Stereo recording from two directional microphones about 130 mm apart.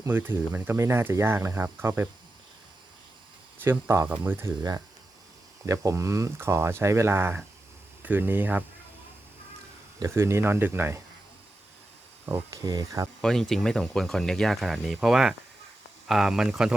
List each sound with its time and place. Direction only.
0.0 s speech: 15° right (ahead or behind)
3.6 s speech: 20° right (ahead or behind)
5.6 s speech: 25° right (ahead or behind)
10.0 s speech: 20° right (ahead or behind)
12.2 s speech: 25° right (ahead or behind)
13.2 s speech: 5° left (ahead or behind)